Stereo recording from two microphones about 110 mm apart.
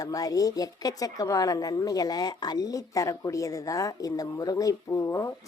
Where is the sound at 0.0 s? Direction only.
35° left (ahead or behind).